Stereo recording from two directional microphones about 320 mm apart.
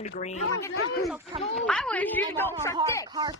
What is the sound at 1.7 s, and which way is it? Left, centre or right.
A woman's voice, centre.